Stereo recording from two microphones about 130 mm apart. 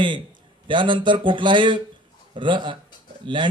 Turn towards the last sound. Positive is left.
turn(degrees=-40)  # may be behind; listen again after turning